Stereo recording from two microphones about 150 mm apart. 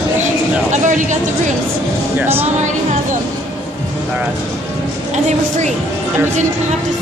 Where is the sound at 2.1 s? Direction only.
15° right (ahead or behind).